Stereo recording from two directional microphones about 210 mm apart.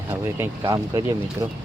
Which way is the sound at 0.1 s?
15° right (ahead or behind).